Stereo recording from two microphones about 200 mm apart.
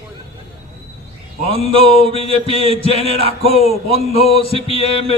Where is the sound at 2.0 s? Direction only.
30° left (ahead or behind).